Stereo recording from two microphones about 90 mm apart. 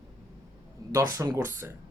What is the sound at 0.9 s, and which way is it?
Speech, 40° right (ahead or behind).